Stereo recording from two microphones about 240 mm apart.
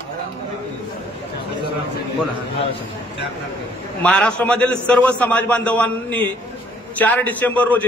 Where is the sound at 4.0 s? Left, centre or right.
Centre.